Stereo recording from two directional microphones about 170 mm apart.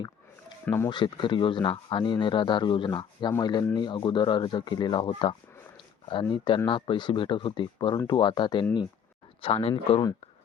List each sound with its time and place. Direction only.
0.6 s speech: 15° left (ahead or behind)
0.9 s speech: 25° left (ahead or behind)
6.3 s speech: 30° left (ahead or behind)